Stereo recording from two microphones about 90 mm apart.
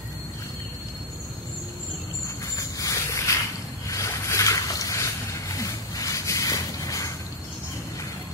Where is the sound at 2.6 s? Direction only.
40° left (ahead or behind).